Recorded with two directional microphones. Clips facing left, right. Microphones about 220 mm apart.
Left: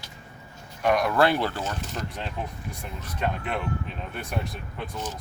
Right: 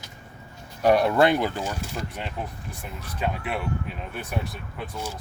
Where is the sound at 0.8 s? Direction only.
35° right (ahead or behind).